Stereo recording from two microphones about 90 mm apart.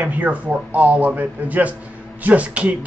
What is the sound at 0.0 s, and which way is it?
A man's voice, 15° right (ahead or behind).